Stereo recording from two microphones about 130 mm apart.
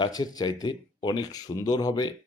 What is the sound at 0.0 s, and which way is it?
Speech, 30° left (ahead or behind).